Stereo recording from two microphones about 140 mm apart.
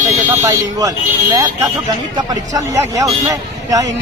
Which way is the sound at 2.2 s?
25° right (ahead or behind).